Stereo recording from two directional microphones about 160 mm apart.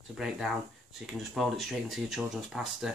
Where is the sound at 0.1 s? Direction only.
Centre (ahead or behind).